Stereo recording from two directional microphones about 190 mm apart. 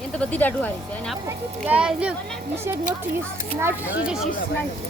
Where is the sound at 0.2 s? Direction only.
10° left (ahead or behind).